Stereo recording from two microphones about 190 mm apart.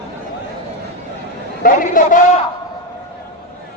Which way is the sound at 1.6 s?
45° left (ahead or behind).